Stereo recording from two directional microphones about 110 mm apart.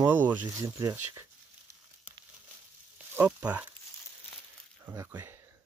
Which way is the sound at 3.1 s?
15° right (ahead or behind).